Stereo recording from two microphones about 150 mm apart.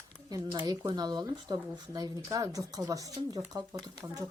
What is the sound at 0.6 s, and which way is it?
Speech, 25° right (ahead or behind).